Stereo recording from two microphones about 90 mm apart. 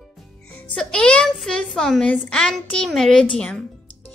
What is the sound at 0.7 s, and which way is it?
A woman's voice, 10° left (ahead or behind).